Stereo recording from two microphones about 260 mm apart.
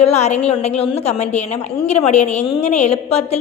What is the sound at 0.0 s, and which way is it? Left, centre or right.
A woman's voice, left.